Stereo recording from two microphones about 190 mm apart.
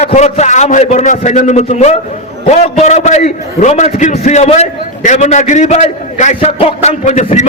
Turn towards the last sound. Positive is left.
turn(degrees=40)  # may be behind; listen again after turning